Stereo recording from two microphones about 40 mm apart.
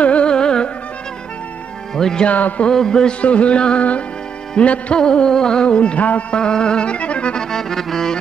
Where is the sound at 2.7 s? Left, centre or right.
Centre.